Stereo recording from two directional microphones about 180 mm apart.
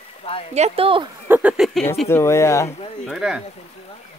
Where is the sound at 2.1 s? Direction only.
15° left (ahead or behind).